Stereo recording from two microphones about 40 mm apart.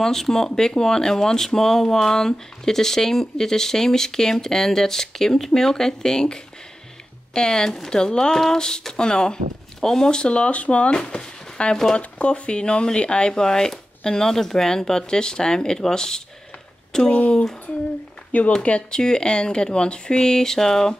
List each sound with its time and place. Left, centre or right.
0.0 s speech: centre
11.7 s speech: centre
12.0 s speech: left
18.6 s speech: left; by 20.9 s centre